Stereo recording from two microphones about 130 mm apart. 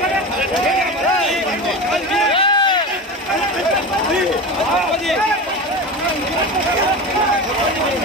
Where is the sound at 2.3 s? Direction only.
40° left (ahead or behind).